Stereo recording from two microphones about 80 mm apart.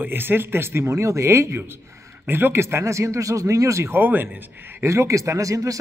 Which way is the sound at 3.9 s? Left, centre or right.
Right.